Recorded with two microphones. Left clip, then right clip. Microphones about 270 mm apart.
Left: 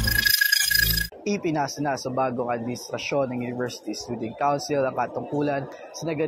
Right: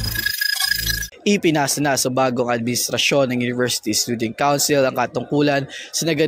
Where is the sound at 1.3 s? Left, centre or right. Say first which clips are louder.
Right 10 dB; right.